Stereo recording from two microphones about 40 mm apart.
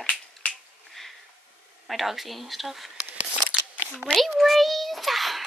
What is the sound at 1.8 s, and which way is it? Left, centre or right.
Speech, centre.